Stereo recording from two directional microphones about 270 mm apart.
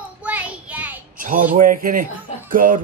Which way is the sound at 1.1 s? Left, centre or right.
Right.